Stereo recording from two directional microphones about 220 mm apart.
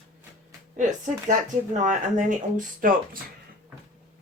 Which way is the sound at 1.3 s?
35° right (ahead or behind).